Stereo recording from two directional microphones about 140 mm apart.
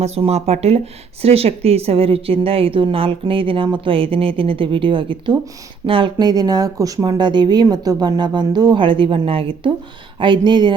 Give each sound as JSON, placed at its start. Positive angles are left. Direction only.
{"t": 0.0, "sound": "a woman's voice", "side_deg": -50}